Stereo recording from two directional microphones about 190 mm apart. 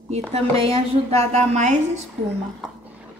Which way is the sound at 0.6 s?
30° right (ahead or behind).